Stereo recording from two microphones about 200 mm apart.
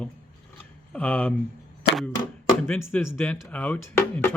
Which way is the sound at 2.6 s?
10° left (ahead or behind).